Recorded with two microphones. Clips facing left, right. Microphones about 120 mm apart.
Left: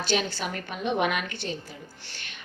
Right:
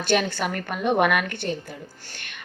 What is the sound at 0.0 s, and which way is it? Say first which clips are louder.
A woman's voice: right 5 dB; 55° right (ahead or behind).